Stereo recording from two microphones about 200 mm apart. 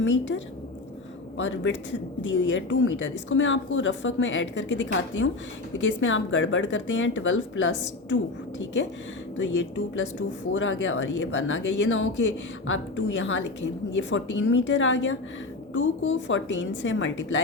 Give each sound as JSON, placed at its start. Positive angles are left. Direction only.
{"t": 0.0, "sound": "speech", "side_deg": 65}
{"t": 1.4, "sound": "speech", "side_deg": 70}
{"t": 9.4, "sound": "speech", "side_deg": 65}